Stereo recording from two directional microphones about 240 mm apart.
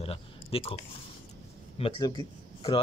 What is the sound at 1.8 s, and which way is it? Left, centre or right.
Speech, left.